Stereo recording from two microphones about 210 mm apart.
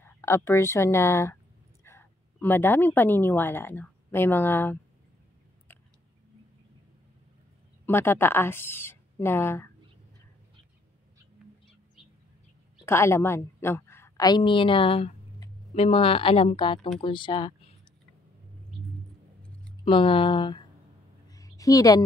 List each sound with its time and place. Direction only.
0.0 s a woman's voice: 10° left (ahead or behind)
7.8 s speech: 10° left (ahead or behind)
12.8 s a woman's voice: 10° left (ahead or behind)
19.8 s speech: 25° left (ahead or behind)
21.3 s a sound: 15° left (ahead or behind)